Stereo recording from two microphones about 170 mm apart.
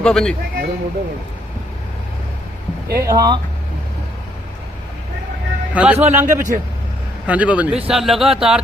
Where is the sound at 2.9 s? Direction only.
15° right (ahead or behind).